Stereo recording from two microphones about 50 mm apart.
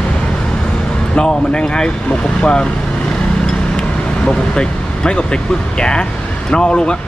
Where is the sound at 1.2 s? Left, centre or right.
Centre.